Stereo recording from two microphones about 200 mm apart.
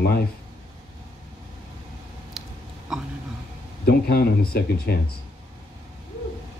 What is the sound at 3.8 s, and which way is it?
Speech, 50° left (ahead or behind).